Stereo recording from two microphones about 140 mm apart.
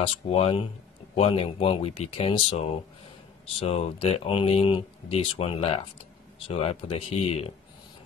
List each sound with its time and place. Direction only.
0.0 s speech: 45° left (ahead or behind)